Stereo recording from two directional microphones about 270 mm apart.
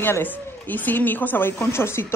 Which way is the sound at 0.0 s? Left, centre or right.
Centre.